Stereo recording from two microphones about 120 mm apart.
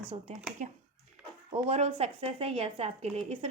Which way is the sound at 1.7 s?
60° right (ahead or behind).